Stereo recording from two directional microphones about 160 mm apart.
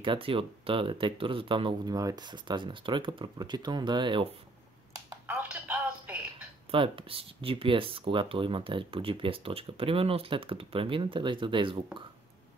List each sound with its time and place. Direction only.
0.0 s speech: 35° right (ahead or behind)
4.9 s a sound: 20° right (ahead or behind)
6.7 s speech: 35° right (ahead or behind)